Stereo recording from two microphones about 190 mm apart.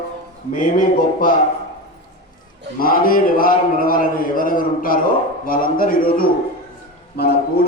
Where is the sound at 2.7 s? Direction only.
50° left (ahead or behind).